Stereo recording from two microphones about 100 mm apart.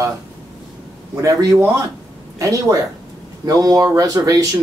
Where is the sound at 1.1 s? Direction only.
35° right (ahead or behind).